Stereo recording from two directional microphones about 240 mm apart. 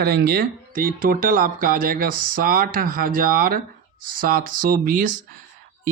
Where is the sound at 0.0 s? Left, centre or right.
Right.